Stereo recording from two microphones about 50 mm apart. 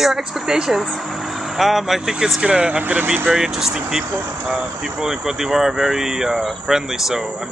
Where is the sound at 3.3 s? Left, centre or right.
Centre.